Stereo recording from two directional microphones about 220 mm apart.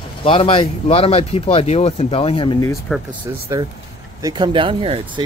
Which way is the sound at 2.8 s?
Centre (ahead or behind).